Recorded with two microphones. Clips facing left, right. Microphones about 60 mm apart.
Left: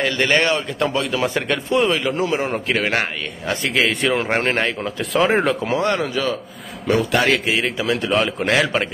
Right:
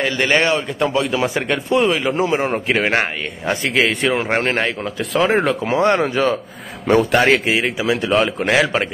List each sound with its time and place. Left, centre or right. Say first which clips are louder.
0.0 s speech: right 1 dB; centre
2.0 s a man's voice: right 2 dB; right
3.6 s speech: right 1 dB; centre
5.7 s speech: right 4 dB; right
7.3 s a man's voice: right 2 dB; centre